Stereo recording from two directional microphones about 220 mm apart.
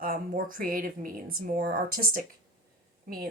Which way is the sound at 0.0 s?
40° right (ahead or behind).